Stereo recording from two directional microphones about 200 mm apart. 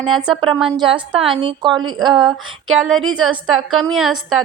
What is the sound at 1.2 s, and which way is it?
Speech, 25° right (ahead or behind).